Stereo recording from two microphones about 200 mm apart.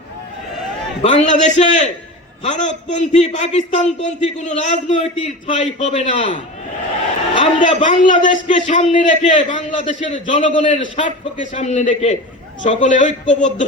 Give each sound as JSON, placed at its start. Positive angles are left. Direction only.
{"t": 1.0, "sound": "a man's voice", "side_deg": 35}
{"t": 7.6, "sound": "a man's voice", "side_deg": 40}